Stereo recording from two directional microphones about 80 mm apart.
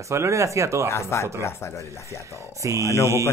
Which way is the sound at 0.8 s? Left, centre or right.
Left.